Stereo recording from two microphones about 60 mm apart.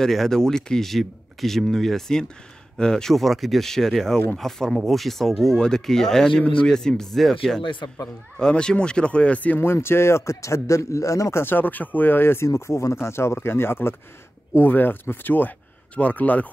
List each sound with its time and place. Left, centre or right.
0.0 s speech: centre; by 9.6 s left
9.6 s a man's voice: left
11.4 s speech: left
12.4 s a man's voice: left